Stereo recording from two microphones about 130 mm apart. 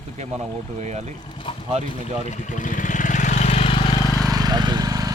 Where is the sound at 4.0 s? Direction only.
30° left (ahead or behind).